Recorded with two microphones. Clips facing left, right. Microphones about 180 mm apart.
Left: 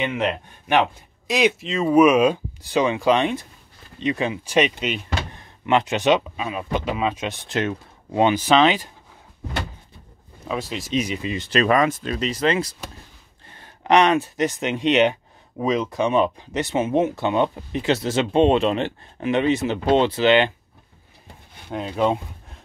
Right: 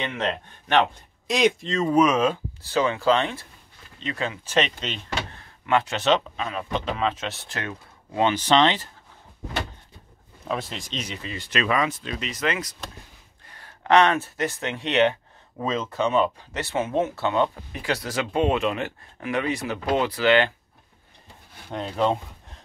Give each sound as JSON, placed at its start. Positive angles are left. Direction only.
{"t": 0.0, "sound": "speech", "side_deg": 10}
{"t": 10.4, "sound": "speech", "side_deg": 0}
{"t": 11.5, "sound": "speech", "side_deg": 45}
{"t": 12.3, "sound": "speech", "side_deg": 30}
{"t": 13.5, "sound": "speech", "side_deg": 20}
{"t": 21.6, "sound": "speech", "side_deg": 5}